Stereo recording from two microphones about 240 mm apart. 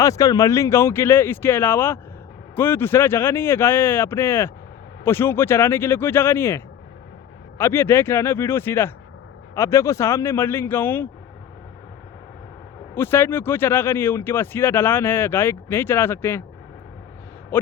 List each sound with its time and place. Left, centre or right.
0.0 s speech: centre
7.6 s speech: centre
12.9 s speech: centre